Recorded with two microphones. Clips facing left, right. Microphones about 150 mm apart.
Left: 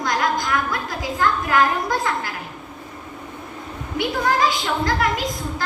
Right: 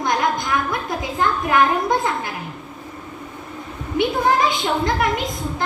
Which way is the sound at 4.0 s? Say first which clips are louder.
Right 2 dB; 25° right (ahead or behind).